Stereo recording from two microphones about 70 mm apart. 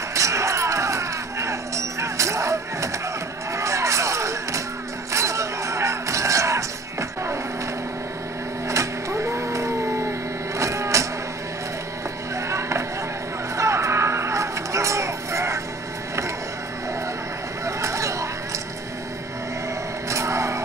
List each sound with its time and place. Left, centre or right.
0.1 s a sound: right
3.5 s music: right
8.6 s cat: right
12.4 s music: right
13.6 s cattle: right
17.6 s a sound: right
20.1 s vehicle: right